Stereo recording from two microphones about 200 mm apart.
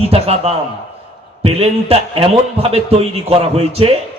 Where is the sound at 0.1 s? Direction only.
30° right (ahead or behind).